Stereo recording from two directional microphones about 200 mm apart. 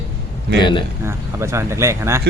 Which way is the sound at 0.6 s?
25° left (ahead or behind).